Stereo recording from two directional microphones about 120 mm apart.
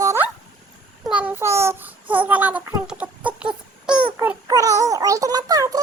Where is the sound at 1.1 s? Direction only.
10° right (ahead or behind).